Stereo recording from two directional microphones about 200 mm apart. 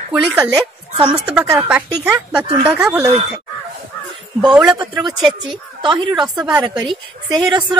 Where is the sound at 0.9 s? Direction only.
25° right (ahead or behind).